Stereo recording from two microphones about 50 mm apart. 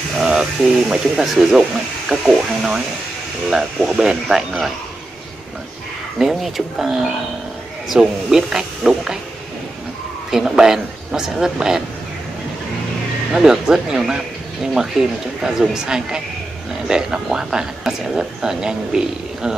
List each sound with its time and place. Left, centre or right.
0.2 s speech: centre
4.5 s speech: centre
6.1 s speech: centre
10.5 s speech: centre
13.3 s speech: centre